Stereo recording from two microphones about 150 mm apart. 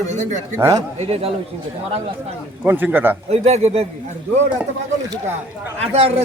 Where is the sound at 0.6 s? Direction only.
25° right (ahead or behind).